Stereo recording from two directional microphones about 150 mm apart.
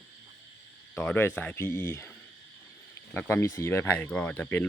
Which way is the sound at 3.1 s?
15° left (ahead or behind).